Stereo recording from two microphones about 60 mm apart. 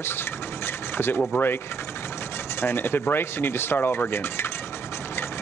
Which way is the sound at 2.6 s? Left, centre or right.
Left.